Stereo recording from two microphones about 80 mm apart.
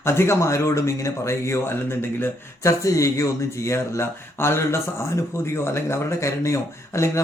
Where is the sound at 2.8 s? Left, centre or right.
Left.